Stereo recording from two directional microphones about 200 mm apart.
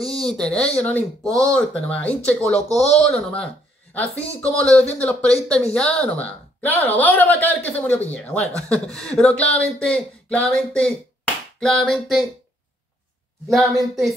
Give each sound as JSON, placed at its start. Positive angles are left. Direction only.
{"t": 0.1, "sound": "speech", "side_deg": 5}
{"t": 2.8, "sound": "speech", "side_deg": 30}
{"t": 4.3, "sound": "a woman's voice", "side_deg": 5}
{"t": 13.5, "sound": "speech", "side_deg": 0}